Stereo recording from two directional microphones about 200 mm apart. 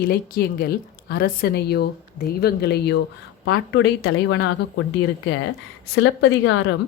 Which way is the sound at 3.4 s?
75° left (ahead or behind).